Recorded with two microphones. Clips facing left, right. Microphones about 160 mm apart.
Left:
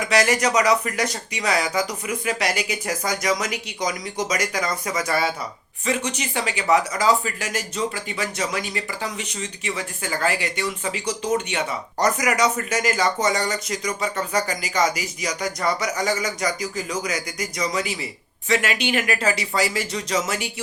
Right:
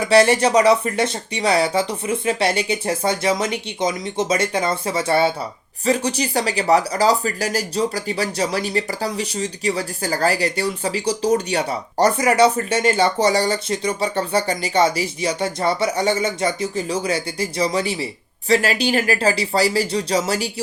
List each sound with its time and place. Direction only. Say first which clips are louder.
0.0 s speech: right 6 dB; 30° right (ahead or behind)